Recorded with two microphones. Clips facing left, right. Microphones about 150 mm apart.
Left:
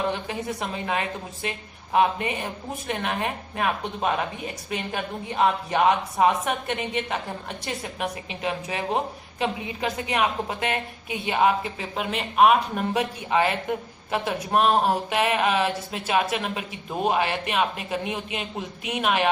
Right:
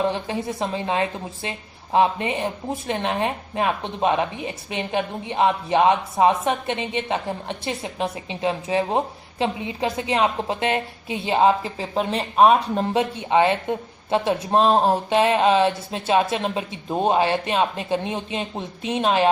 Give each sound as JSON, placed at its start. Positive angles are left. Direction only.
{"t": 0.1, "sound": "a woman's voice", "side_deg": -30}